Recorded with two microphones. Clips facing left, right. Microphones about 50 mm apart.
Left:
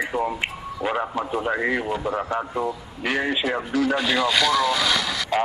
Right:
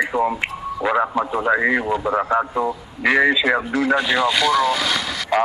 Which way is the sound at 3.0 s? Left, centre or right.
Right.